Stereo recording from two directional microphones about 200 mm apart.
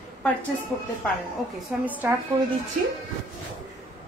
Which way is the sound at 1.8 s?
10° right (ahead or behind).